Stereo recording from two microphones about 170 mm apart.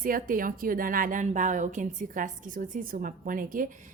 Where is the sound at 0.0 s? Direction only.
55° right (ahead or behind).